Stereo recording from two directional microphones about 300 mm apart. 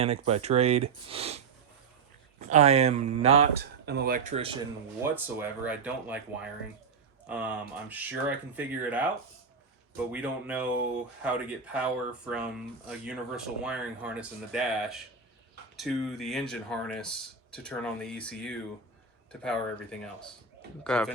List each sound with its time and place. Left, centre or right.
0.0 s speech: right
2.5 s speech: right
3.8 s speech: right
5.1 s speech: centre
12.9 s speech: centre
20.8 s speech: centre